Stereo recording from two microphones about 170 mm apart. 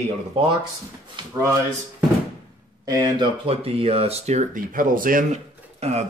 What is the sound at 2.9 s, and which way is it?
Speech, 25° right (ahead or behind).